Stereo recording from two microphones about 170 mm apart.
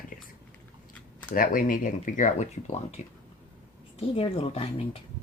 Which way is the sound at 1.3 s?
55° left (ahead or behind).